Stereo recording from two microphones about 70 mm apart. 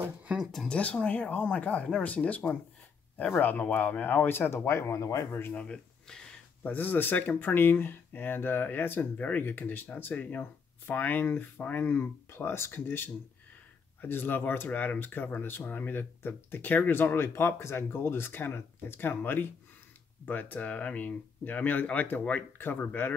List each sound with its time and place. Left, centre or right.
0.4 s speech: centre
0.7 s speech: centre; by 5.5 s left
5.5 s speech: centre
6.6 s speech: left
12.3 s speech: left